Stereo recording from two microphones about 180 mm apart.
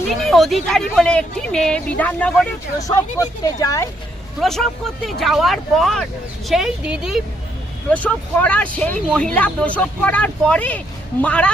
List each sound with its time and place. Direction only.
0.2 s speech: centre (ahead or behind)
2.7 s speech: 20° left (ahead or behind)
4.4 s speech: centre (ahead or behind)
7.9 s speech: 10° left (ahead or behind)